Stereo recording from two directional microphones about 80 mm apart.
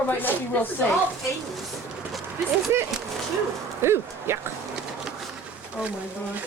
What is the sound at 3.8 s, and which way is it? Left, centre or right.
Speech, right.